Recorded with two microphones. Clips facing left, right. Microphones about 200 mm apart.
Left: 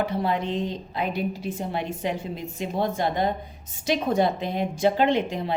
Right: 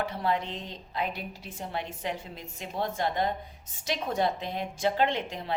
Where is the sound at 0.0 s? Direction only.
15° left (ahead or behind).